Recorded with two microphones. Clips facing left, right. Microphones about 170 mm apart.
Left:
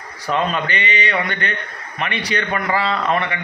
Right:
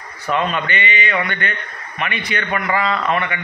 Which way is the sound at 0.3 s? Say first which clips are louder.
Even; 35° left (ahead or behind).